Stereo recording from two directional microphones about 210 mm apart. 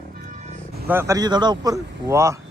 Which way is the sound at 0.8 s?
10° right (ahead or behind).